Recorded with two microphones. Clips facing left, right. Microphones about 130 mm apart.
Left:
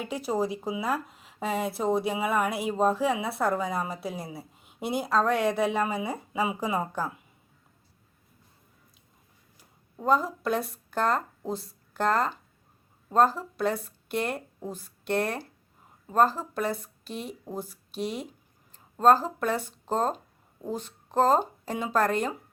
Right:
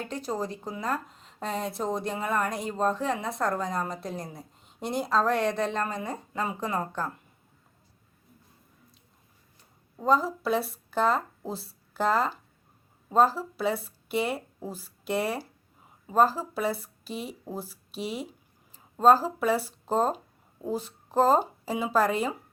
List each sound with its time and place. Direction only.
0.0 s speech: 10° left (ahead or behind)
9.6 s speech: centre (ahead or behind)